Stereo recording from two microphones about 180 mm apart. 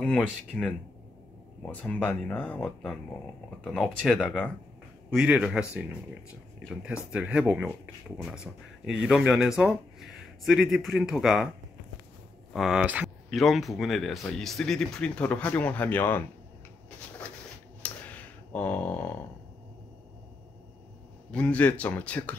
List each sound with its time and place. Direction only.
0.5 s speech: 5° left (ahead or behind)
12.5 s speech: 5° right (ahead or behind)
17.8 s a sound: 10° left (ahead or behind)
21.3 s speech: 5° left (ahead or behind)